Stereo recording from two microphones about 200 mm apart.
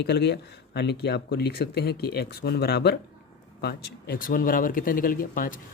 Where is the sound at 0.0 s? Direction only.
55° left (ahead or behind).